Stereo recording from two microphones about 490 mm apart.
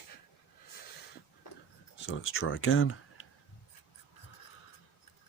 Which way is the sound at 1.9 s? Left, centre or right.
Left.